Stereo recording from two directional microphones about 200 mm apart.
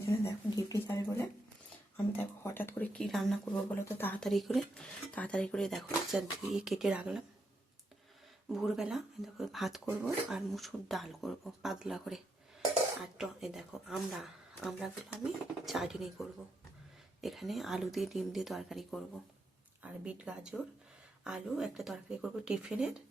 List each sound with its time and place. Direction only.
0.1 s a sound: 15° left (ahead or behind)
2.1 s speech: 10° left (ahead or behind); by 7.2 s 5° right (ahead or behind)
8.4 s speech: centre (ahead or behind)